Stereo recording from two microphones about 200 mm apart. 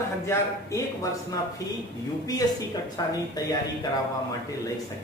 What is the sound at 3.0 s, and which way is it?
Speech, 20° left (ahead or behind).